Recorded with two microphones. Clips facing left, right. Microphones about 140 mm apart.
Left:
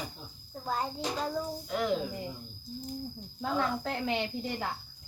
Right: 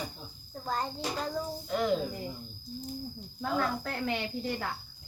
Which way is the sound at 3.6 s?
20° left (ahead or behind).